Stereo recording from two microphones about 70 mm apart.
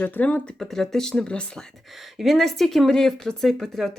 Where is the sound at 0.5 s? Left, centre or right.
Centre.